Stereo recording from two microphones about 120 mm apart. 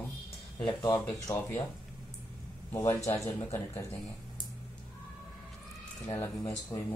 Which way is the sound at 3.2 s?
25° left (ahead or behind).